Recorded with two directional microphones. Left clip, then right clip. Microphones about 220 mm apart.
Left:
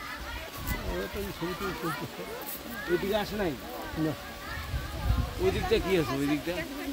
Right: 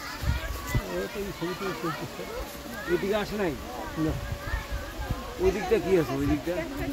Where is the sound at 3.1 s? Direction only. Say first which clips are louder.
Right 2 dB; 15° left (ahead or behind).